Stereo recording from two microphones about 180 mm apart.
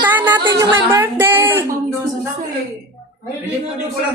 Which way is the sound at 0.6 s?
15° right (ahead or behind).